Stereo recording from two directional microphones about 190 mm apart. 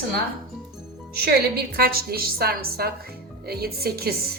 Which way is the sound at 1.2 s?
55° right (ahead or behind).